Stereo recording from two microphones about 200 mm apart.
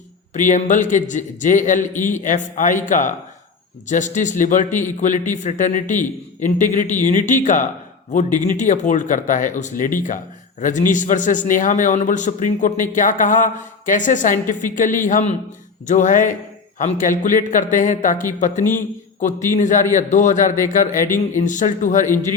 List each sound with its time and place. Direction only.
0.3 s a man's voice: 40° left (ahead or behind)
3.8 s a man's voice: 40° left (ahead or behind)